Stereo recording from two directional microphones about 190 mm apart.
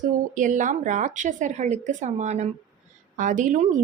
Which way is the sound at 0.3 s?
40° right (ahead or behind).